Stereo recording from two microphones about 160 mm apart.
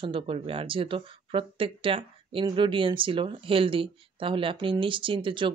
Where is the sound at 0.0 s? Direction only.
35° right (ahead or behind).